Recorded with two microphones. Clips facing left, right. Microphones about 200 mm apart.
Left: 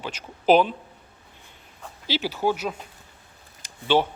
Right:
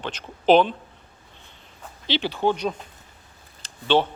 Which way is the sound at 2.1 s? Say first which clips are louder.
Right 2 dB; 5° left (ahead or behind).